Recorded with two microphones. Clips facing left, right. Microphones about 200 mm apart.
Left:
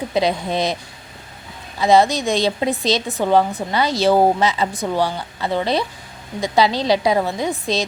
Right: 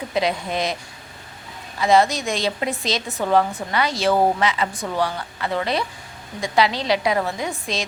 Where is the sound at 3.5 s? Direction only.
35° left (ahead or behind).